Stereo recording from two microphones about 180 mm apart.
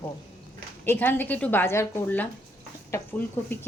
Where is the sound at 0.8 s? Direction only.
10° left (ahead or behind).